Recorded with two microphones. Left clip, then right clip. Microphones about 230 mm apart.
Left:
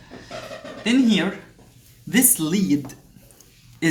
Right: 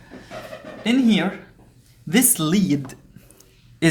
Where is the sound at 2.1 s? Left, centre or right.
Right.